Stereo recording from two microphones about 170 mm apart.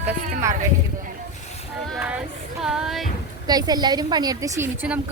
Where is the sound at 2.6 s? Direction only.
5° right (ahead or behind).